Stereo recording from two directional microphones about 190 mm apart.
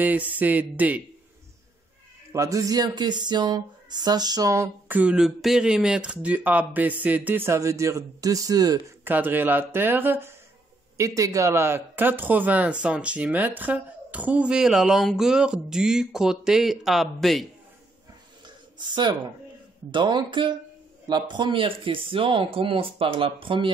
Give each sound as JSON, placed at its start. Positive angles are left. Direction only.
{"t": 0.0, "sound": "speech", "side_deg": -10}
{"t": 2.3, "sound": "speech", "side_deg": -15}
{"t": 18.8, "sound": "speech", "side_deg": -25}